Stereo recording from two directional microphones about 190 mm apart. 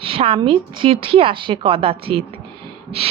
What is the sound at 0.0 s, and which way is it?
A woman's voice, 30° right (ahead or behind).